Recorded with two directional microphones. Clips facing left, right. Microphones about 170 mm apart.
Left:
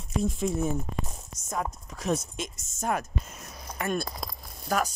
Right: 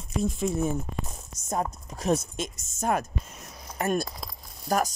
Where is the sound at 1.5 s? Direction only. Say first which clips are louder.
Right 3 dB; 40° right (ahead or behind).